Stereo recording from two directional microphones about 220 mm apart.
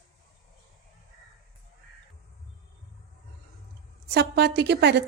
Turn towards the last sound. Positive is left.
turn(degrees=-50)  # may be behind; listen again after turning